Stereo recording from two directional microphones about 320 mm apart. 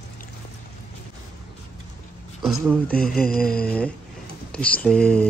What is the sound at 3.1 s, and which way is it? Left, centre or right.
Mantra, left.